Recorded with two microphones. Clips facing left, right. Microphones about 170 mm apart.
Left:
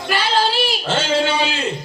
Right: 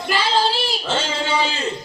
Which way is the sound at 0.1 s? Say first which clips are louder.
Left 1 dB; 65° left (ahead or behind).